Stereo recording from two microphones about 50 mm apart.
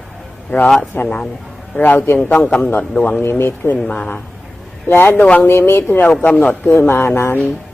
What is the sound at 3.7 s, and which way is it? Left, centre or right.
Speech, left.